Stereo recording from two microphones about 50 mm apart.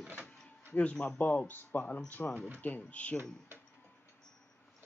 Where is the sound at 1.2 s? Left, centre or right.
Left.